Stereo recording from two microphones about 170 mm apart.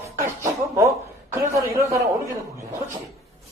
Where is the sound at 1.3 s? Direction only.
15° right (ahead or behind).